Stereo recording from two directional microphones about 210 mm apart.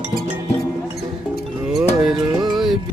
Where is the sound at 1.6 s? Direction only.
Centre (ahead or behind).